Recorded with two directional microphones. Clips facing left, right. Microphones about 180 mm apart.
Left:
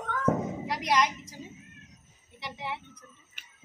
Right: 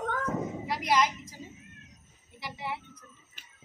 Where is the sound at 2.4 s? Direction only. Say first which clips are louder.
Even; centre (ahead or behind).